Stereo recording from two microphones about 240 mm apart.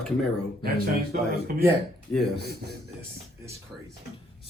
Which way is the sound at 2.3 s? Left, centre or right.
Right.